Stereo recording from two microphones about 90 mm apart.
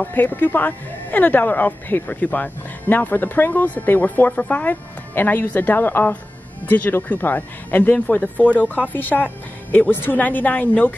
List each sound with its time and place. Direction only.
0.0 s speech: 20° left (ahead or behind)